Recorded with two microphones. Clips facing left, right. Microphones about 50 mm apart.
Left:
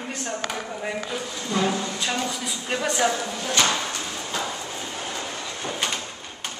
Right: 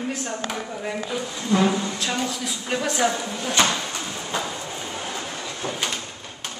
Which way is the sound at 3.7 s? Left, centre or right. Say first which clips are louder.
Left 1 dB; centre.